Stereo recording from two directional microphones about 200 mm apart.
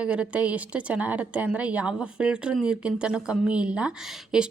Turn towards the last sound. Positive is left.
turn(degrees=-5)  # may be behind; listen again after turning